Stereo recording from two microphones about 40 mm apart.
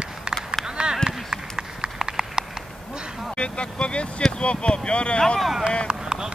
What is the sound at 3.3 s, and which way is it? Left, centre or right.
Speech, left.